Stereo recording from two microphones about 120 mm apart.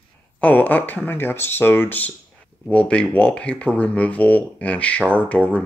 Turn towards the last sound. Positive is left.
turn(degrees=10)  # may be behind; listen again after turning